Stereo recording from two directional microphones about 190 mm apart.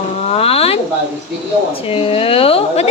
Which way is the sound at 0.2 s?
35° left (ahead or behind).